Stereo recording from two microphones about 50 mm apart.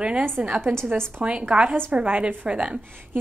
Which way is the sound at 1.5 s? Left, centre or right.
Right.